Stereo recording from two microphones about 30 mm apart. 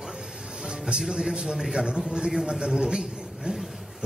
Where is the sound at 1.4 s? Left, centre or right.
Right.